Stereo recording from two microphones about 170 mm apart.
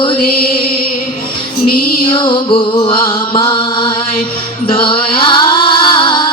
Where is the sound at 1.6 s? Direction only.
55° left (ahead or behind).